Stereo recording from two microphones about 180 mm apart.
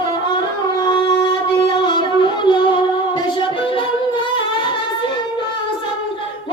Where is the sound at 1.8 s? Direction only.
25° left (ahead or behind).